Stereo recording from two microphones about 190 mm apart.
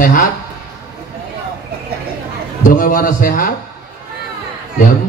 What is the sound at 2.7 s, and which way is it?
Mantra, 45° left (ahead or behind).